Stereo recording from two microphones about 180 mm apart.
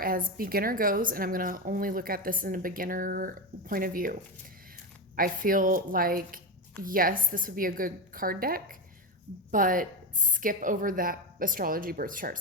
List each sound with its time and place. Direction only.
0.0 s a woman's voice: 55° right (ahead or behind)